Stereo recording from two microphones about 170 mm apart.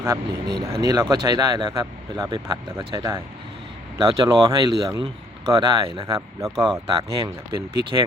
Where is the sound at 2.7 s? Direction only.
15° right (ahead or behind).